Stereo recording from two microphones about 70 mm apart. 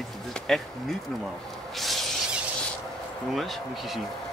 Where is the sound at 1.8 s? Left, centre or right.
Centre.